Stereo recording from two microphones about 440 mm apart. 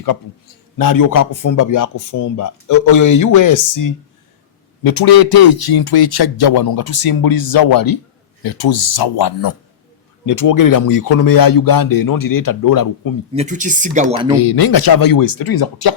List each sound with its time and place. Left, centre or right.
0.8 s speech: left
10.2 s speech: left
13.3 s speech: centre
14.3 s speech: left